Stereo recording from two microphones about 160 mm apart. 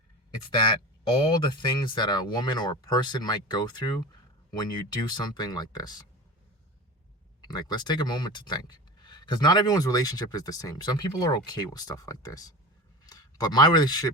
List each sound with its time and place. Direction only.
1.1 s speech: 30° left (ahead or behind)
7.4 s speech: 25° left (ahead or behind)